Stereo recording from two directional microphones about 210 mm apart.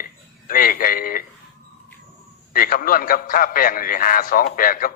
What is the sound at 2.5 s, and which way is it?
A man's voice, 45° left (ahead or behind).